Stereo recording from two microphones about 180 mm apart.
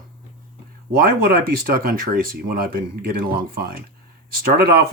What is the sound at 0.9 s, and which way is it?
Speech, 55° right (ahead or behind).